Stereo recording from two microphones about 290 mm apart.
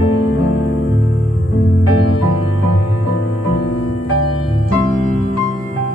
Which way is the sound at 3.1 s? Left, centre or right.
Left.